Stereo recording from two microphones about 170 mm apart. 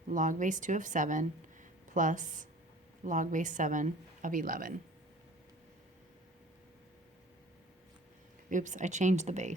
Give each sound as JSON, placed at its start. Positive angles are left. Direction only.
{"t": 0.1, "sound": "speech", "side_deg": -50}
{"t": 8.4, "sound": "speech", "side_deg": -45}